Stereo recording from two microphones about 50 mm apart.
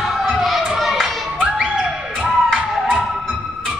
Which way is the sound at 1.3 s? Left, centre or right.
Centre.